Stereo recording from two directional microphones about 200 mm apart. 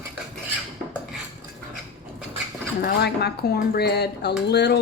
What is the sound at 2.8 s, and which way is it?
Speech, 50° left (ahead or behind).